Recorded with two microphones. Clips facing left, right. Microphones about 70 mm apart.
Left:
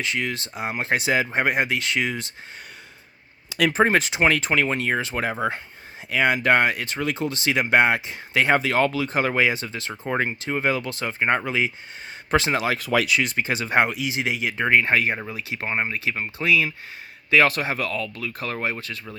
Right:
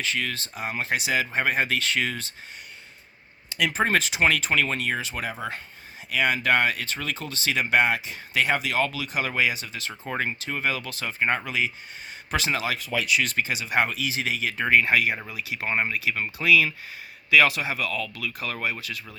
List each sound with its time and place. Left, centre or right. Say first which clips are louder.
0.0 s speech: left 2 dB; left
3.7 s speech: left 4 dB; left
12.9 s speech: left 6 dB; left
13.3 s speech: left 3 dB; left
13.7 s speech: left 3 dB; left
17.3 s speech: left 1 dB; left